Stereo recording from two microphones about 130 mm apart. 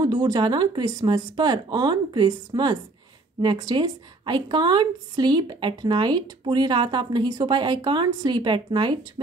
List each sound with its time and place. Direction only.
0.0 s a woman's voice: 30° right (ahead or behind)